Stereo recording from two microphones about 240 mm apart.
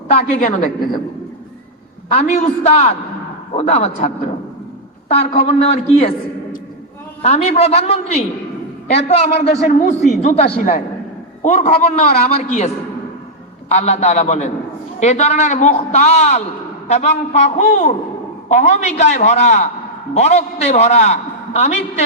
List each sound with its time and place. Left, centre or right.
0.1 s a man's voice: left
2.1 s a man's voice: left
7.2 s a man's voice: left